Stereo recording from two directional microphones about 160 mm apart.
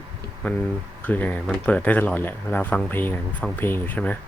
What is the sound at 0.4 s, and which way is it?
Speech, 10° left (ahead or behind).